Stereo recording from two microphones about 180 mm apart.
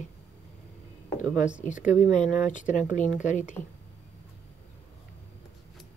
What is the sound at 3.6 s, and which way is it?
Speech, 10° left (ahead or behind).